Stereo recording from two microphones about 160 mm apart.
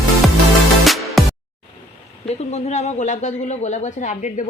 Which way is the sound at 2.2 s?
45° left (ahead or behind).